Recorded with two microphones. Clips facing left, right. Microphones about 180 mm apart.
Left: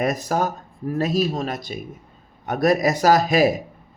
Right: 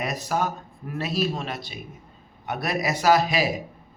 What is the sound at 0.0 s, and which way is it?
Speech, 45° left (ahead or behind).